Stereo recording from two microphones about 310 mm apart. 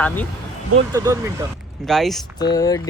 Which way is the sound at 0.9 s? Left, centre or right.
Centre.